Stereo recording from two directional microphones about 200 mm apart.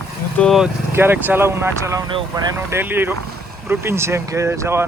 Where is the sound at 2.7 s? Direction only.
10° right (ahead or behind).